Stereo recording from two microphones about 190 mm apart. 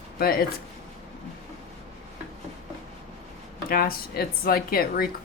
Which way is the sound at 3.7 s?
50° left (ahead or behind).